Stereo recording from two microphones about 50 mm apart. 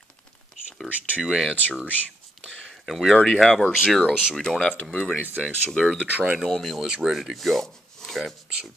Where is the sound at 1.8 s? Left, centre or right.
Left.